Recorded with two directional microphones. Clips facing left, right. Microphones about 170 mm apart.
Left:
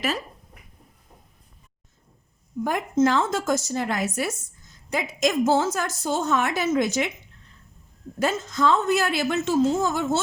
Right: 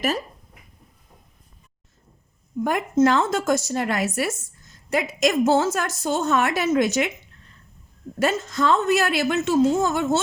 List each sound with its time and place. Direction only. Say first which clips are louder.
2.6 s a woman's voice: right 2 dB; 70° right (ahead or behind)
8.2 s a woman's voice: right 1 dB; 65° right (ahead or behind)